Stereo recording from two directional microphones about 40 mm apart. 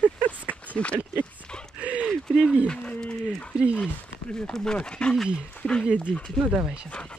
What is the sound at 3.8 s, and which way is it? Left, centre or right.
Speech, left.